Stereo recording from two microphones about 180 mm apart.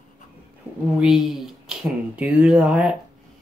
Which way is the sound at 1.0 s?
Centre (ahead or behind).